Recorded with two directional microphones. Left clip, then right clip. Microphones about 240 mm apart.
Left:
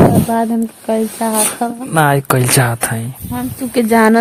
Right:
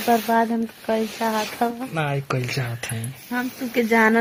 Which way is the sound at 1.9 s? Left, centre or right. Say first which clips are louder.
Left 13 dB; left.